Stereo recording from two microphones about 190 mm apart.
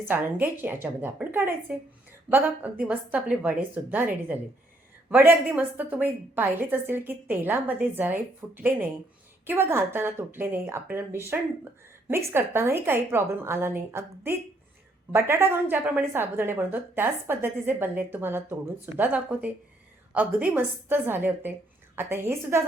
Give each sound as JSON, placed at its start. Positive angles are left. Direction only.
{"t": 0.0, "sound": "a woman's voice", "side_deg": -10}